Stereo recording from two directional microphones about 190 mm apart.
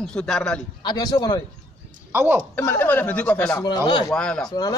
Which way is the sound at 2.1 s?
10° right (ahead or behind).